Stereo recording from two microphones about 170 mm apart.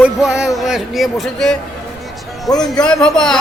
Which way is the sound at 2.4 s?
20° left (ahead or behind).